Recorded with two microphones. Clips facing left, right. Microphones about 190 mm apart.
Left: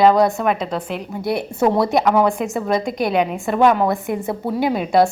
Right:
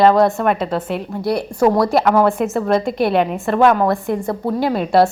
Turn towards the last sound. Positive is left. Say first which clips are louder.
# right 1 dB
turn(degrees=0)  # may be behind; listen again after turning